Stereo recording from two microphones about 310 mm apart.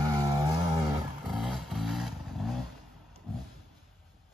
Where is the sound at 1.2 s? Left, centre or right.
Centre.